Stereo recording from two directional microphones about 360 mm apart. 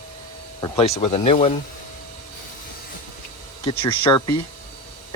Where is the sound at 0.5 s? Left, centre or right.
Centre.